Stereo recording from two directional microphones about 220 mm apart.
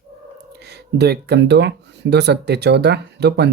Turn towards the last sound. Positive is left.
turn(degrees=-50)  # may be behind; listen again after turning